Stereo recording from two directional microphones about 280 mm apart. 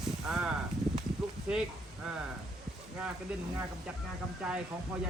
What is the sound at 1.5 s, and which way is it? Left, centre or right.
Speech, centre.